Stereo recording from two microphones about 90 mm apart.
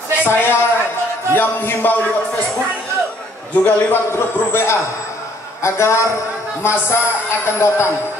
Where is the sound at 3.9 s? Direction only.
25° left (ahead or behind).